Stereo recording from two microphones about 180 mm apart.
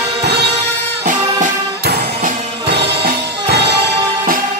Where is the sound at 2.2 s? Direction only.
65° right (ahead or behind).